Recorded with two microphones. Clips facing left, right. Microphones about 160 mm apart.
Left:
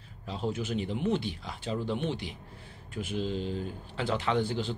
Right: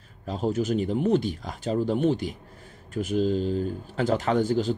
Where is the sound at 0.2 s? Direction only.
45° right (ahead or behind).